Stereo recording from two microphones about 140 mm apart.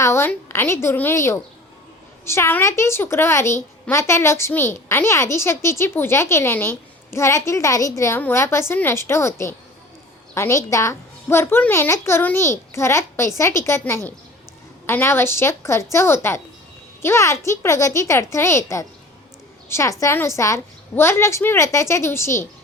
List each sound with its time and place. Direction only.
0.0 s a woman's voice: 15° left (ahead or behind)